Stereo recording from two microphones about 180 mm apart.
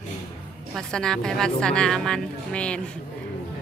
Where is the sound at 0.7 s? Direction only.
5° left (ahead or behind).